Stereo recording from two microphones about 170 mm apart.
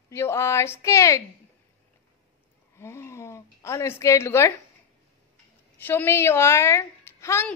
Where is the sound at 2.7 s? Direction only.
15° left (ahead or behind).